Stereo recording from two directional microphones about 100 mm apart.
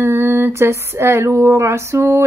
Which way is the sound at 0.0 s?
25° right (ahead or behind).